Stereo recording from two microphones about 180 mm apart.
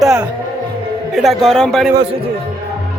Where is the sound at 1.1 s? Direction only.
Centre (ahead or behind).